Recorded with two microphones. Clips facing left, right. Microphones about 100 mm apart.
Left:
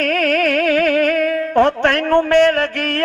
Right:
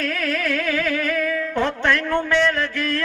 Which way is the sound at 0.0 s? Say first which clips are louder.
Left 8 dB; 60° left (ahead or behind).